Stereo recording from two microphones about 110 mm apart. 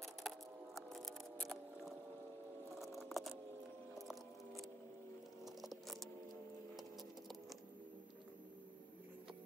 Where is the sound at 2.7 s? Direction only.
Centre (ahead or behind).